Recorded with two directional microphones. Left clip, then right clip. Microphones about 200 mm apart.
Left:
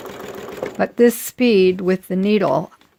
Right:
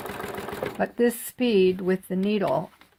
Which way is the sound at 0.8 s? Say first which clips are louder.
Left 9 dB; 50° left (ahead or behind).